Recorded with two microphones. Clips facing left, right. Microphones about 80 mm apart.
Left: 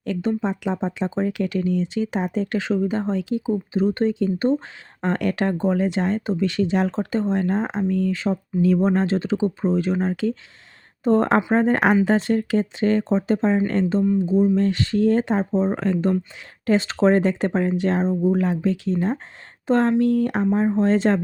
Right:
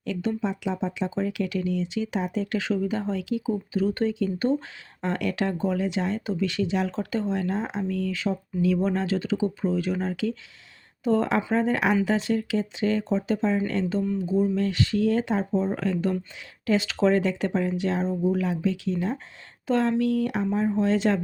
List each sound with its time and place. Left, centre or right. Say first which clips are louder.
0.0 s speech: left 4 dB; left
14.0 s speech: left 6 dB; left
14.6 s speech: left 4 dB; left